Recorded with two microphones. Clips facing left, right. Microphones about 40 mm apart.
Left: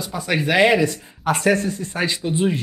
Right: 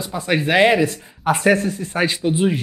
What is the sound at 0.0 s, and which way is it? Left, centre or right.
Speech, centre.